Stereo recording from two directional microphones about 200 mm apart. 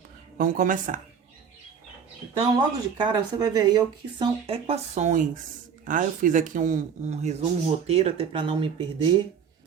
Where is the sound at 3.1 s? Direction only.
20° right (ahead or behind).